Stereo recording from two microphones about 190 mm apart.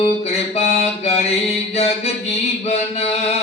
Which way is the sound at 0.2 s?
35° left (ahead or behind).